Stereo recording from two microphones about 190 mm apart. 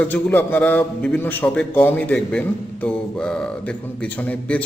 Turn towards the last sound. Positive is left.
turn(degrees=10)  # may be behind; listen again after turning